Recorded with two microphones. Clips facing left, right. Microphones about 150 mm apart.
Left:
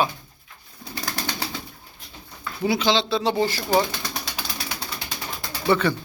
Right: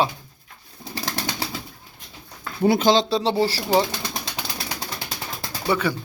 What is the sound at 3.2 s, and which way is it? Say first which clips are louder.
Speech: right 1 dB; 30° right (ahead or behind).